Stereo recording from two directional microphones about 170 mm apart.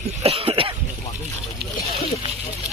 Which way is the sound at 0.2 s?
35° right (ahead or behind).